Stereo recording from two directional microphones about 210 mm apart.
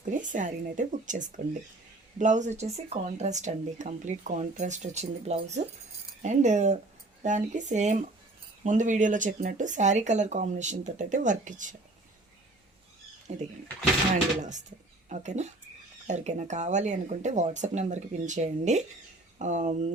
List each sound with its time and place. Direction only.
0.0 s speech: 35° right (ahead or behind)
13.3 s speech: 35° right (ahead or behind)
15.1 s speech: 35° right (ahead or behind)